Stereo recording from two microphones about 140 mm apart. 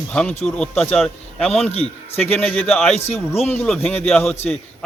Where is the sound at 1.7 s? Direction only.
45° left (ahead or behind).